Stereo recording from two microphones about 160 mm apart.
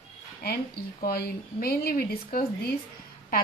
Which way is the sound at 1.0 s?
75° left (ahead or behind).